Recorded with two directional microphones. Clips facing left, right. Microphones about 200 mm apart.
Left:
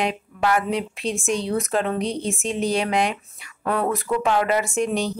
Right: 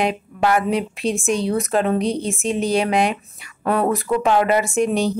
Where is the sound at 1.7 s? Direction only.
15° right (ahead or behind).